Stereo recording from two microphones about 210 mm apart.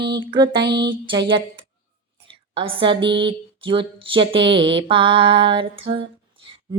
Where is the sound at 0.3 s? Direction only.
25° right (ahead or behind).